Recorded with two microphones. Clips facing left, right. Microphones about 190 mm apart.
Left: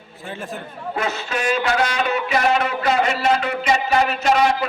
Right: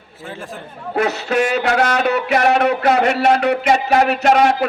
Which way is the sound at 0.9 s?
70° right (ahead or behind).